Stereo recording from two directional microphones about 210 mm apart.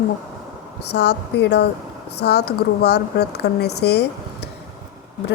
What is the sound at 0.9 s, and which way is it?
A woman's voice, 55° left (ahead or behind).